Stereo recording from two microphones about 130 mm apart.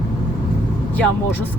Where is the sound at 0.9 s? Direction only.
10° left (ahead or behind).